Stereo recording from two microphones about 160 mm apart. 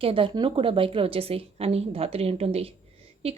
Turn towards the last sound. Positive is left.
turn(degrees=-35)  # may be behind; listen again after turning